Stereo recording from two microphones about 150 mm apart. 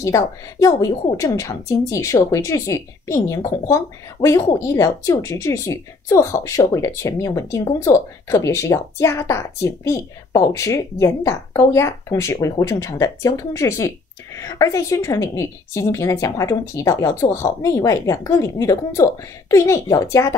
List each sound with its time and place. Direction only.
0.0 s a woman's voice: 20° left (ahead or behind)